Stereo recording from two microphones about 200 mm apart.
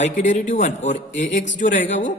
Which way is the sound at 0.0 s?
40° left (ahead or behind).